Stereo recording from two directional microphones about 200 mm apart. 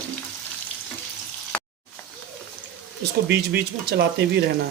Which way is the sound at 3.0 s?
55° right (ahead or behind).